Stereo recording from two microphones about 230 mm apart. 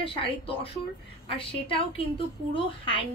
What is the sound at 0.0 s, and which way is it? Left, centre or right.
A woman's voice, left.